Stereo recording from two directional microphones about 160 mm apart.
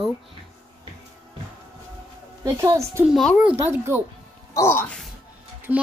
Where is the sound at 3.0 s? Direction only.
Centre (ahead or behind).